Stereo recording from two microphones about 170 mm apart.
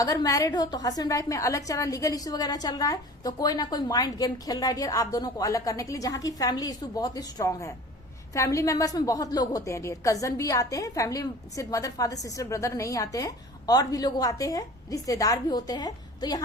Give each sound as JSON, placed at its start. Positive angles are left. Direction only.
{"t": 0.0, "sound": "a woman's voice", "side_deg": 20}